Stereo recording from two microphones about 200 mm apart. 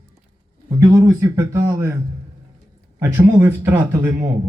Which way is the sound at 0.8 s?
15° right (ahead or behind).